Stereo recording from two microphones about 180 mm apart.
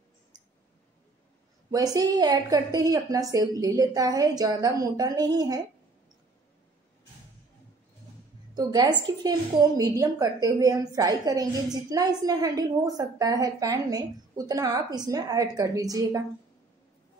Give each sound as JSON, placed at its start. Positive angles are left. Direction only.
{"t": 1.7, "sound": "a woman's voice", "side_deg": -20}
{"t": 8.5, "sound": "a woman's voice", "side_deg": -20}